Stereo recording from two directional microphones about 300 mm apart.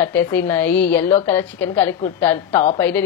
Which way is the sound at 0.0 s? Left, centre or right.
Centre.